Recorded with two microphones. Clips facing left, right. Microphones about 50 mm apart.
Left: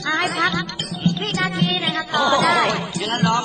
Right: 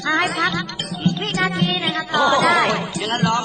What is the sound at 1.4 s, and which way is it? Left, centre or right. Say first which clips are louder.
Speech: right 1 dB; centre.